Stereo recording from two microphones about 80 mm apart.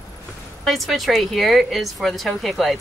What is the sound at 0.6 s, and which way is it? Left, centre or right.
A woman's voice, centre.